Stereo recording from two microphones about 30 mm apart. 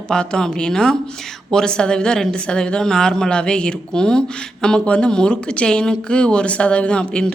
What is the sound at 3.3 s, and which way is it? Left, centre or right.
Speech, left.